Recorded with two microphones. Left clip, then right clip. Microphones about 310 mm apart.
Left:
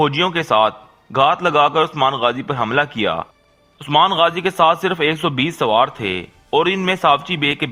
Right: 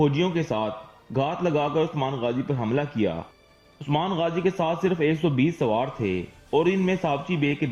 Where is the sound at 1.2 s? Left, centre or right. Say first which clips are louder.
Left 11 dB; left.